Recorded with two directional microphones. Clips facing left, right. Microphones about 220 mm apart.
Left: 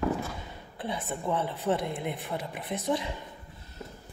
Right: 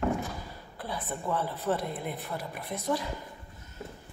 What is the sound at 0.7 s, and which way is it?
A woman's voice, 25° left (ahead or behind).